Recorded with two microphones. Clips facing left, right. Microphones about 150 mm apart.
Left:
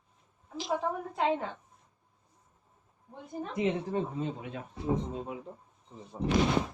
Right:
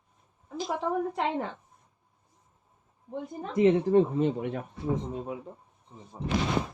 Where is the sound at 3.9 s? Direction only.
75° right (ahead or behind).